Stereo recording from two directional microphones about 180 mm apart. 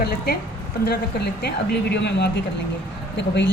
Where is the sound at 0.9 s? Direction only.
65° left (ahead or behind).